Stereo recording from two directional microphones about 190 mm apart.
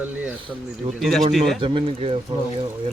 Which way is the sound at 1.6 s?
25° right (ahead or behind).